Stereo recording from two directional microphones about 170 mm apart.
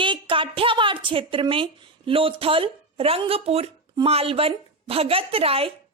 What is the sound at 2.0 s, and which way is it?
A woman's voice, 35° right (ahead or behind).